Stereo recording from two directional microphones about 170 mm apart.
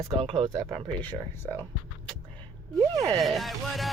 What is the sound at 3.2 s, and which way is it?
Speech, centre (ahead or behind).